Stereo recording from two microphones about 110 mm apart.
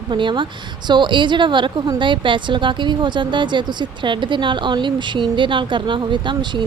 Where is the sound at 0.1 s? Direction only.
45° right (ahead or behind).